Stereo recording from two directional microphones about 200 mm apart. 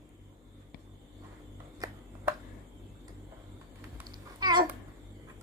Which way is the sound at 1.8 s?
20° right (ahead or behind).